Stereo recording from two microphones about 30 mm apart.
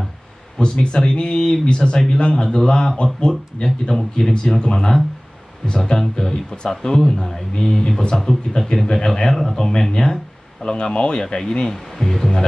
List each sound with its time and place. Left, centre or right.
0.6 s speech: left
3.0 s speech: left
3.6 s speech: centre
7.6 s speech: left
9.3 s speech: centre
9.6 s speech: left
11.7 s speech: centre